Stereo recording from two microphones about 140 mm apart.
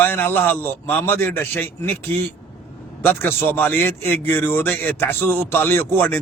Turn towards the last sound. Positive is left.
turn(degrees=15)  # may be behind; listen again after turning